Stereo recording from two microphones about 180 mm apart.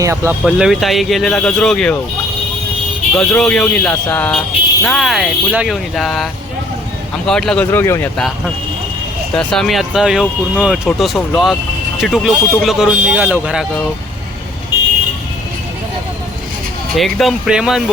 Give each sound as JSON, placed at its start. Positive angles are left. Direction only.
{"t": 0.0, "sound": "speech", "side_deg": -15}
{"t": 0.4, "sound": "speech", "side_deg": -5}
{"t": 3.2, "sound": "speech", "side_deg": 5}
{"t": 7.3, "sound": "speech", "side_deg": 5}
{"t": 9.3, "sound": "speech", "side_deg": 5}
{"t": 17.0, "sound": "speech", "side_deg": 0}